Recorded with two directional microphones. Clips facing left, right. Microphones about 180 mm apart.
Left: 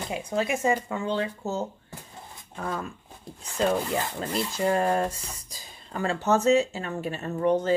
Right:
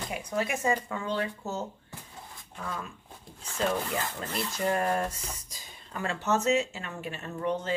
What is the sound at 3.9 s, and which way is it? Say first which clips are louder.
Speech: left 5 dB; 20° left (ahead or behind).